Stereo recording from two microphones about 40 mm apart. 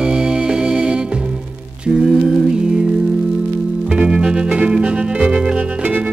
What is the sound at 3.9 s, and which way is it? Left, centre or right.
Music, right.